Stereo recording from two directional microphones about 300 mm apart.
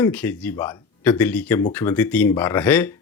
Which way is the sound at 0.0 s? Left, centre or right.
Centre.